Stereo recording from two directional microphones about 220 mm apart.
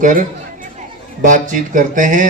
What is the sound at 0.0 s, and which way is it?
Speech, 35° right (ahead or behind).